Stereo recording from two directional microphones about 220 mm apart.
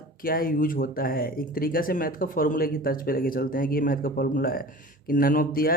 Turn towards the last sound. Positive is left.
turn(degrees=40)  # may be behind; listen again after turning